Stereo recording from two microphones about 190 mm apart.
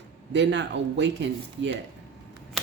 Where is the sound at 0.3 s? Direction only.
65° right (ahead or behind).